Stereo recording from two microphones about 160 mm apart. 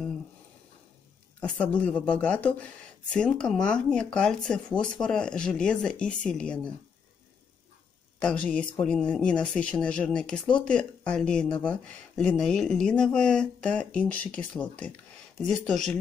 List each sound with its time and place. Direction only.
1.4 s speech: 10° left (ahead or behind)
8.2 s speech: 5° left (ahead or behind)